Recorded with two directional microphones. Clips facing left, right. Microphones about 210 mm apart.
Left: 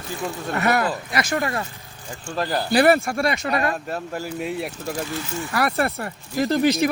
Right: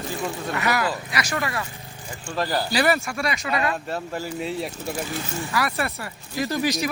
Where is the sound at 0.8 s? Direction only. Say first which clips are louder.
Left 3 dB; 45° left (ahead or behind).